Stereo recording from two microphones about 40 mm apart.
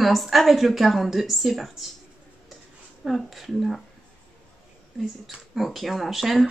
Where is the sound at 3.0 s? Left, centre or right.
Centre.